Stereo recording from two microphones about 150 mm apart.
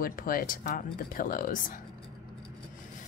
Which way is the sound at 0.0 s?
70° left (ahead or behind).